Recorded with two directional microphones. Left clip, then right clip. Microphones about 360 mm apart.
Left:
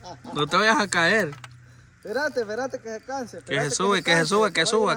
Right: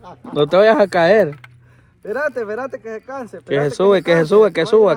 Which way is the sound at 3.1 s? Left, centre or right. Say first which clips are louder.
Right 3 dB; right.